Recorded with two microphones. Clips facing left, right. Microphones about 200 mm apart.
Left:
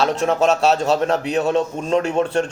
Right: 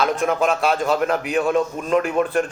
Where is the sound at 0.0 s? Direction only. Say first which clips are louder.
Left 2 dB; 30° left (ahead or behind).